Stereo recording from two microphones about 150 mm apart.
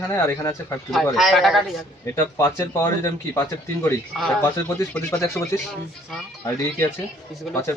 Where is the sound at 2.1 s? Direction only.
20° left (ahead or behind).